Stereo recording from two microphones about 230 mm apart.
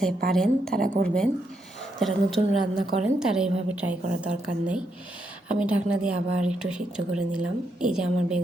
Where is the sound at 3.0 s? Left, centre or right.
Centre.